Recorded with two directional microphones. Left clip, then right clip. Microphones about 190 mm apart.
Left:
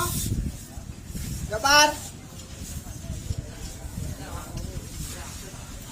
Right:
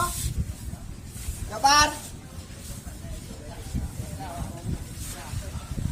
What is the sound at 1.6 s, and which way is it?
Speech, 50° right (ahead or behind).